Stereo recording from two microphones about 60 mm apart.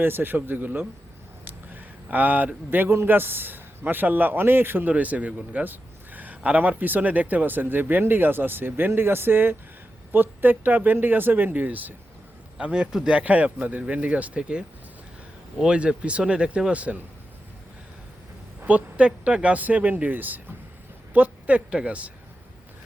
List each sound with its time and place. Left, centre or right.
0.0 s a man's voice: right
12.5 s speech: centre
13.1 s speech: right
18.6 s speech: right